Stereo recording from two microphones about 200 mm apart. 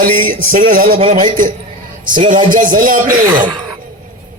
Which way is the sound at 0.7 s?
45° right (ahead or behind).